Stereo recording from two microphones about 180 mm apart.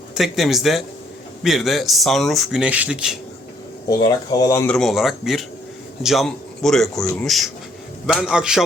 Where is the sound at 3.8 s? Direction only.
20° left (ahead or behind).